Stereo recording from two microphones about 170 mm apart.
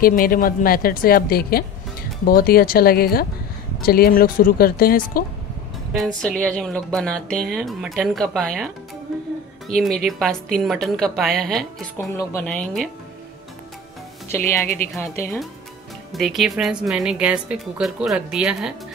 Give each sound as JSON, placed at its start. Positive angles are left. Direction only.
{"t": 0.0, "sound": "a woman's voice", "side_deg": 55}
{"t": 5.9, "sound": "a woman's voice", "side_deg": 5}
{"t": 12.1, "sound": "a woman's voice", "side_deg": 15}
{"t": 14.3, "sound": "a woman's voice", "side_deg": 15}
{"t": 16.1, "sound": "a woman's voice", "side_deg": 0}